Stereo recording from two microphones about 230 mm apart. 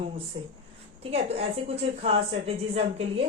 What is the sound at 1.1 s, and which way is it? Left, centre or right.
A woman's voice, right.